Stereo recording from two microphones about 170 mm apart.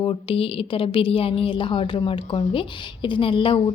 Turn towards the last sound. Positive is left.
turn(degrees=30)  # may be behind; listen again after turning